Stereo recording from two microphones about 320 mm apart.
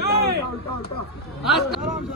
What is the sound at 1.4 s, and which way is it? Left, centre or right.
Speech, centre.